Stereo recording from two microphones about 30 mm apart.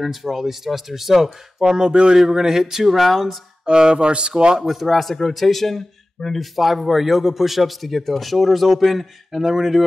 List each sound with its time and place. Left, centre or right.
0.0 s speech: centre
1.6 s a sound: right
2.1 s speech: centre
3.6 s speech: right
4.6 s speech: centre
4.8 s speech: centre